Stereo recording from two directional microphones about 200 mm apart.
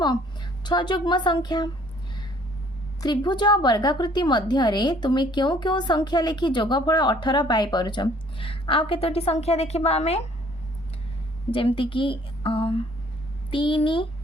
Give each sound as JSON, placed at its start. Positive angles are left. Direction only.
{"t": 0.6, "sound": "a woman's voice", "side_deg": 20}
{"t": 3.0, "sound": "a woman's voice", "side_deg": 20}
{"t": 11.5, "sound": "a woman's voice", "side_deg": 25}